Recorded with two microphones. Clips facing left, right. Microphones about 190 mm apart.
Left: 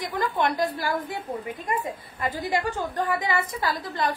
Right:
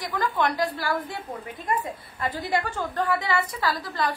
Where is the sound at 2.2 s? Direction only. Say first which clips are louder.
Even; 15° left (ahead or behind).